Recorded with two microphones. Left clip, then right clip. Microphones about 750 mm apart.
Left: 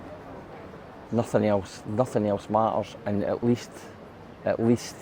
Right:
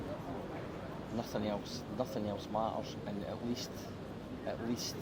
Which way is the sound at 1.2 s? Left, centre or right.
Left.